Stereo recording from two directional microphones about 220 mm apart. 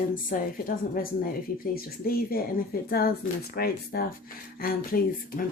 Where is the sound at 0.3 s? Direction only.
40° left (ahead or behind).